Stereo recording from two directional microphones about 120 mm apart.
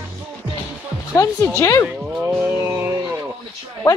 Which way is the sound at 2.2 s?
20° right (ahead or behind).